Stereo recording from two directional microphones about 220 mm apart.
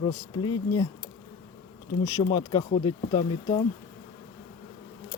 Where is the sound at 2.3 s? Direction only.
25° left (ahead or behind).